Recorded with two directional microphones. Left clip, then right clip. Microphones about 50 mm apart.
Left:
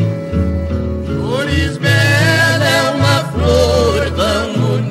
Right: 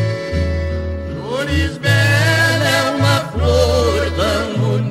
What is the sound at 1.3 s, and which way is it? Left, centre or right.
Music, centre.